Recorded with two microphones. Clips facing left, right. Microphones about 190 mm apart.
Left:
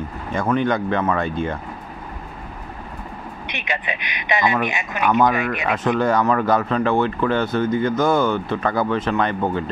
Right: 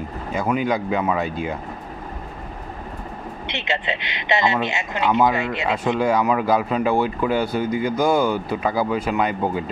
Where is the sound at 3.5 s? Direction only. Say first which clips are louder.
Right 2 dB; 15° left (ahead or behind).